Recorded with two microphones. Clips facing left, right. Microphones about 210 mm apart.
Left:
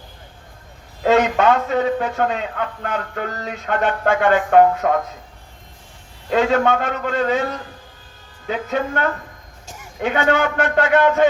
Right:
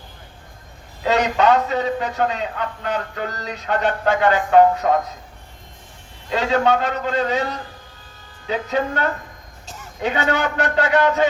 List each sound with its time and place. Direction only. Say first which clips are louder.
1.0 s speech: left 2 dB; 50° left (ahead or behind)
6.3 s speech: left 2 dB; 55° left (ahead or behind)
8.4 s speech: even; 50° left (ahead or behind)
9.6 s a sound: right 1 dB; 10° left (ahead or behind)
10.0 s speech: left 3 dB; 50° left (ahead or behind)